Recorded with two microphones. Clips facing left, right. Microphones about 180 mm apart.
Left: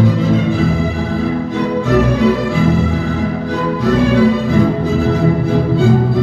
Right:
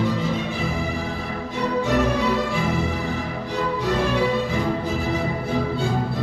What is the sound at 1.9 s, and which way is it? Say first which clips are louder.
Music: left 9 dB; 90° left.